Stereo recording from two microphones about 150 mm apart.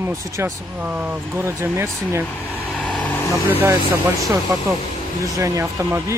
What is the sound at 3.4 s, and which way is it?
Speech, 15° right (ahead or behind).